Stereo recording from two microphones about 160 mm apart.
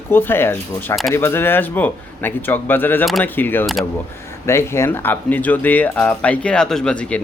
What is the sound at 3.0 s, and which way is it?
Speech, centre (ahead or behind).